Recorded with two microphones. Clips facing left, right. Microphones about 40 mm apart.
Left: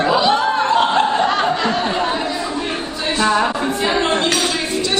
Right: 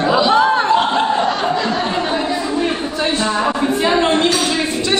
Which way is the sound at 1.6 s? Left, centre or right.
Centre.